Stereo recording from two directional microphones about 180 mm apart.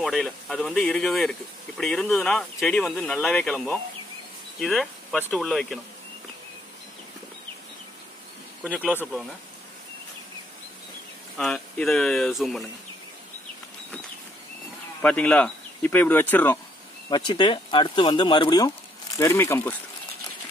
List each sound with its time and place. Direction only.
0.0 s speech: centre (ahead or behind)
8.9 s speech: 5° left (ahead or behind)
11.3 s speech: centre (ahead or behind)
15.0 s speech: 5° left (ahead or behind)
17.1 s speech: 25° left (ahead or behind)
19.1 s speech: 15° left (ahead or behind)